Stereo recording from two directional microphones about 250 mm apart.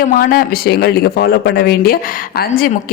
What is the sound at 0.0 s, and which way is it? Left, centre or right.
A man's voice, left.